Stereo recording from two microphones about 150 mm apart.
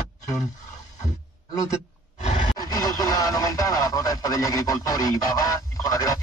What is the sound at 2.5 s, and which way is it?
Speech, 25° left (ahead or behind).